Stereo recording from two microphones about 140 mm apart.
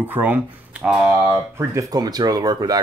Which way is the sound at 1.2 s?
20° right (ahead or behind).